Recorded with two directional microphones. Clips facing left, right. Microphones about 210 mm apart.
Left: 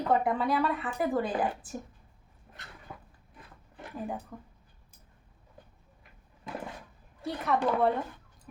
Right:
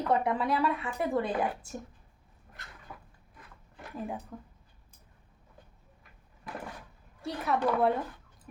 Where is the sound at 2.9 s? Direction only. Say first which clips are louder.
Left 2 dB; 20° left (ahead or behind).